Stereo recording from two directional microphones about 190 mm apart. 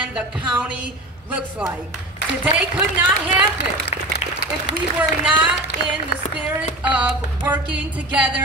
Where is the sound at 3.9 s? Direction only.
35° left (ahead or behind).